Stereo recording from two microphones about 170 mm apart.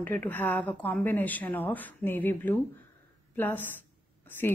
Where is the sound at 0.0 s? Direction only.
10° left (ahead or behind).